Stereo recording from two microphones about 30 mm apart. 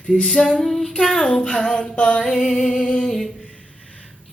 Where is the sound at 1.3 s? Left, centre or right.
Left.